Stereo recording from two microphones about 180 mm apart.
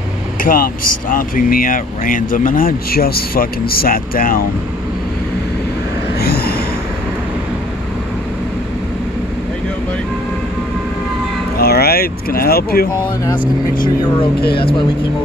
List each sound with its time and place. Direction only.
0.4 s speech: 50° left (ahead or behind)
6.2 s a sound: 60° left (ahead or behind)
11.5 s vehicle: 60° left (ahead or behind)
14.5 s speech: 30° left (ahead or behind)